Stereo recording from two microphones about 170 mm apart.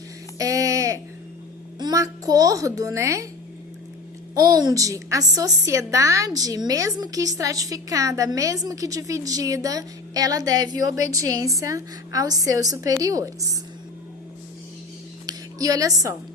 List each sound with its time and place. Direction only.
0.3 s a sound: 20° right (ahead or behind)
1.8 s a woman's voice: 20° right (ahead or behind)
4.4 s a woman's voice: 20° right (ahead or behind)
15.3 s speech: 20° right (ahead or behind)